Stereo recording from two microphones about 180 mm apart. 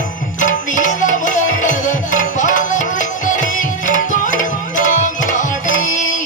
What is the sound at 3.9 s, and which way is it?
Tabla, 45° left (ahead or behind).